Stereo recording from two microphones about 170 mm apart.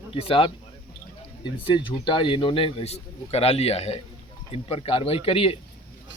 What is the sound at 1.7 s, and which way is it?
Speech, 30° left (ahead or behind).